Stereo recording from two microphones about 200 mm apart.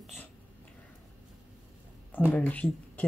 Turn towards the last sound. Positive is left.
turn(degrees=5)  # may be behind; listen again after turning